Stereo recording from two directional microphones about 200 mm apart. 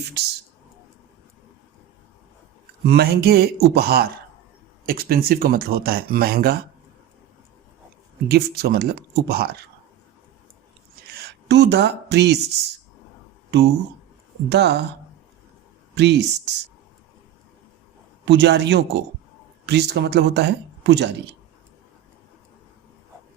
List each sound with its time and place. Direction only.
2.8 s speech: 55° right (ahead or behind)
8.3 s speech: 50° right (ahead or behind)
11.1 s speech: 55° right (ahead or behind)
13.5 s speech: 60° right (ahead or behind)
16.0 s speech: 60° right (ahead or behind)
18.3 s speech: 60° right (ahead or behind)